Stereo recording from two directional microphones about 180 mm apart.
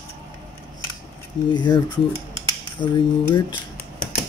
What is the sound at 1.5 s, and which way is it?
Speech, 25° left (ahead or behind).